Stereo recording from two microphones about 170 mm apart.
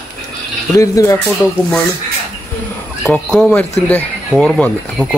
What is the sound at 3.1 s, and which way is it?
Speech, centre (ahead or behind).